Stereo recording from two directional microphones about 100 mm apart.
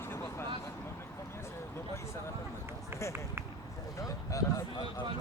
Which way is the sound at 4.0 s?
35° left (ahead or behind).